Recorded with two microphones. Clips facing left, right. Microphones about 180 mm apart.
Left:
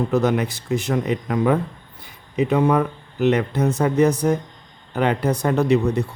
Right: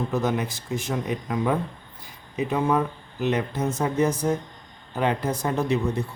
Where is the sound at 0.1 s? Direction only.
70° left (ahead or behind).